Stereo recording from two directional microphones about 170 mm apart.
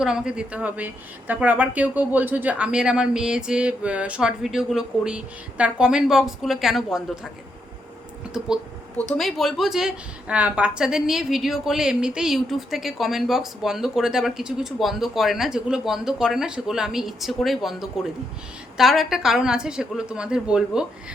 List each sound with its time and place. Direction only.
0.0 s a woman's voice: 5° right (ahead or behind)
9.1 s a woman's voice: centre (ahead or behind)